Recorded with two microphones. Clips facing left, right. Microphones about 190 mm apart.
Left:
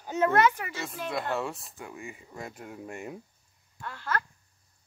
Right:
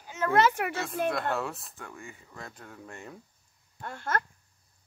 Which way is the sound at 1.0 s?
Centre (ahead or behind).